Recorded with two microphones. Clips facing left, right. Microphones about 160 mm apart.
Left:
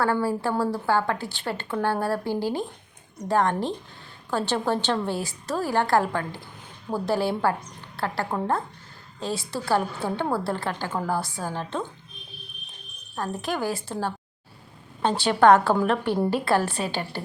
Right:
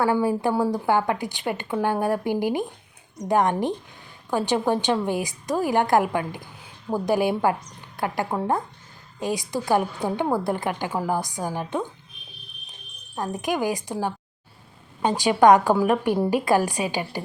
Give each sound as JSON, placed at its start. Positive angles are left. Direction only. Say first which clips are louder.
{"t": 0.0, "sound": "a woman's voice", "louder": "right 3 dB", "side_deg": -15}
{"t": 13.1, "sound": "a woman's voice", "louder": "right 3 dB", "side_deg": -15}